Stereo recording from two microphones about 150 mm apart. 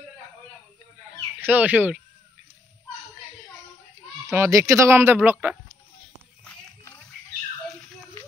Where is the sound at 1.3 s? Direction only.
10° right (ahead or behind).